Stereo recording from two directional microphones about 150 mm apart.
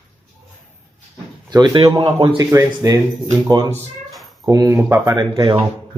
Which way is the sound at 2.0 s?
35° right (ahead or behind).